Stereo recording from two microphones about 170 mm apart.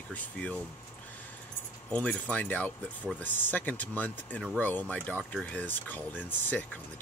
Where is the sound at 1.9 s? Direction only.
10° left (ahead or behind).